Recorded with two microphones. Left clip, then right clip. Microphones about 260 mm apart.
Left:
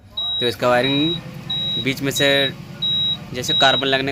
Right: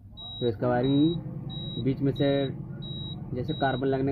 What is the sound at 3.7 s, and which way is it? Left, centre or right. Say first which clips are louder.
Speech: left 10 dB; centre.